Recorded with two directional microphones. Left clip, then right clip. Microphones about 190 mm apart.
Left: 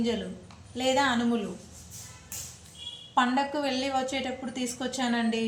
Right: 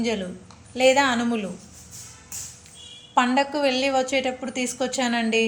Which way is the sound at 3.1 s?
35° right (ahead or behind).